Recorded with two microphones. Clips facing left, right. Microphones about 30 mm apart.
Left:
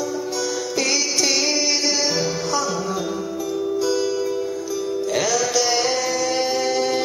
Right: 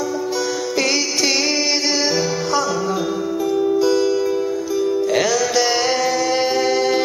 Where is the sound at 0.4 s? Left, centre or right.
Centre.